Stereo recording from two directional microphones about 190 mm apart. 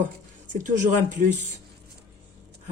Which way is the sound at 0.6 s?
40° right (ahead or behind).